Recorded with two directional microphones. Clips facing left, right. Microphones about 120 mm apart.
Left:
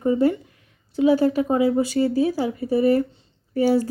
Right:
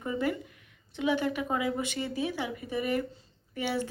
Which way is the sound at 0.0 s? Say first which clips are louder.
Left 11 dB; 30° left (ahead or behind).